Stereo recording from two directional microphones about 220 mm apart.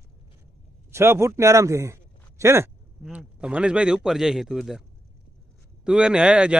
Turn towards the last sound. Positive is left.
turn(degrees=-5)  # may be behind; listen again after turning